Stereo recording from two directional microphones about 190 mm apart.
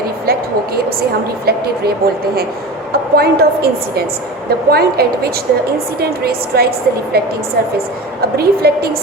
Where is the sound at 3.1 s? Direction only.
55° right (ahead or behind).